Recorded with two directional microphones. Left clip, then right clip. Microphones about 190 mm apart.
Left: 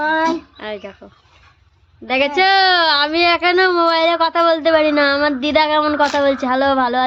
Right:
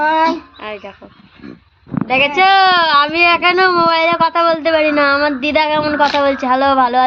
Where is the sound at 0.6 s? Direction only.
25° left (ahead or behind).